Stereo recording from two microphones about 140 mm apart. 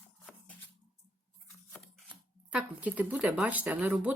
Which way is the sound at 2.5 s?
10° right (ahead or behind).